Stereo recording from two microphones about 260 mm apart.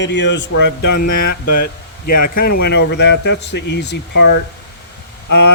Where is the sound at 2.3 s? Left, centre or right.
Left.